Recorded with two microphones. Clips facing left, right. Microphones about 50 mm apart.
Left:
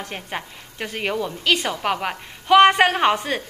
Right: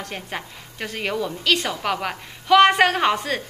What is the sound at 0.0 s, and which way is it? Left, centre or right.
A woman's voice, centre.